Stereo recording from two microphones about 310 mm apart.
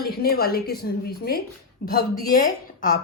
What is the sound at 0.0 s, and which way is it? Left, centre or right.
Speech, left.